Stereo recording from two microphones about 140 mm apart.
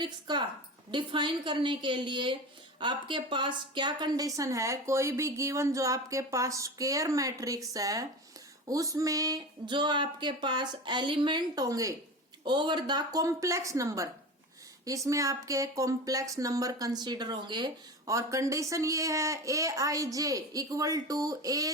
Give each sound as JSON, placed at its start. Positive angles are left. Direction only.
{"t": 0.0, "sound": "speech", "side_deg": -35}